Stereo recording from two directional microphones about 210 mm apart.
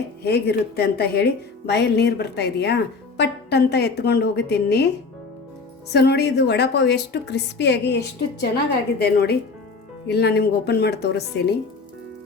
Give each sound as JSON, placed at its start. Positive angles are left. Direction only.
{"t": 0.3, "sound": "speech", "side_deg": 50}
{"t": 5.9, "sound": "speech", "side_deg": 50}